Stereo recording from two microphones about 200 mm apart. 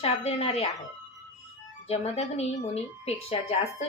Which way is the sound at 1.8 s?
30° left (ahead or behind).